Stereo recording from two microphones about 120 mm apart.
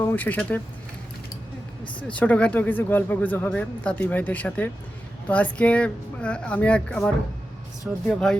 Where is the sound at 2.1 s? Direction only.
10° left (ahead or behind).